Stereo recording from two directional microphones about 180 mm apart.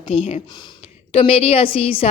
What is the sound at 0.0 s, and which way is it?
A woman's voice, 30° left (ahead or behind).